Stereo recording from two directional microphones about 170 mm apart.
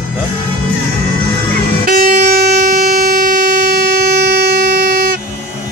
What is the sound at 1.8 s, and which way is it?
Vehicle horn, 60° right (ahead or behind).